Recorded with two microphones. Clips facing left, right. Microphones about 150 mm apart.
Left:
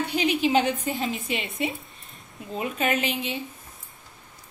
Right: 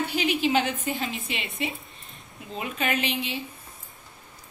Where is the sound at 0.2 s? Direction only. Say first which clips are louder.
Left 2 dB; 35° left (ahead or behind).